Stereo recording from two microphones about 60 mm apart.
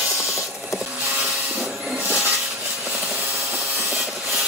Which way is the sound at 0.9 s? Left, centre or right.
Right.